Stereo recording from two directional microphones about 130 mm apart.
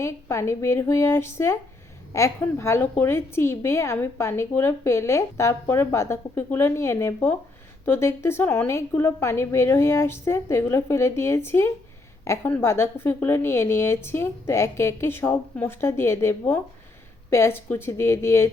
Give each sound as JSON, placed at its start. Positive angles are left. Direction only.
{"t": 0.0, "sound": "a woman's voice", "side_deg": 20}